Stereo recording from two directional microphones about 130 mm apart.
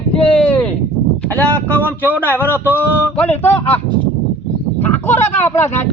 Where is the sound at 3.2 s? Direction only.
15° left (ahead or behind).